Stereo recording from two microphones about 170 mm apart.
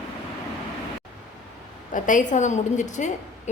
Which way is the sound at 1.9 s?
50° left (ahead or behind).